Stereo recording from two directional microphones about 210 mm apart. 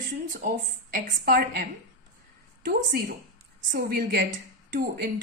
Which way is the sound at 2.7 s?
45° right (ahead or behind).